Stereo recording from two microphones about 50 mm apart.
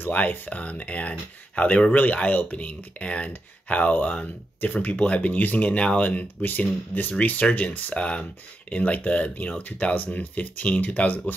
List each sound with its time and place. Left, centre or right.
0.1 s speech: left